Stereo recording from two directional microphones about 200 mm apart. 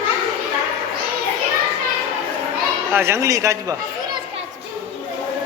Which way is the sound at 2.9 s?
15° right (ahead or behind).